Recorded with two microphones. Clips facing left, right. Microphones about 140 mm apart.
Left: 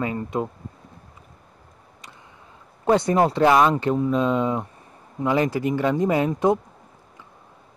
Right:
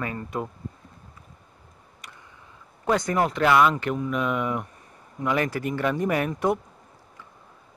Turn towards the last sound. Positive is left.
turn(degrees=20)  # may be behind; listen again after turning